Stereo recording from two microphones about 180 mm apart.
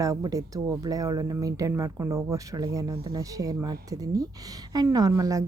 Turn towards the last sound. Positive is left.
turn(degrees=-20)  # may be behind; listen again after turning